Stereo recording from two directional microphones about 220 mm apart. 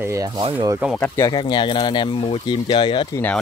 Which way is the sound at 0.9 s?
10° left (ahead or behind).